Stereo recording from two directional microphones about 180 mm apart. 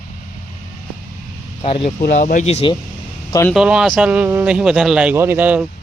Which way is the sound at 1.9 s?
45° left (ahead or behind).